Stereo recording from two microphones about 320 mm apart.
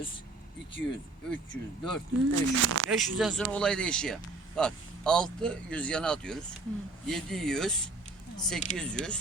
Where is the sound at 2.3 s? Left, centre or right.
Right.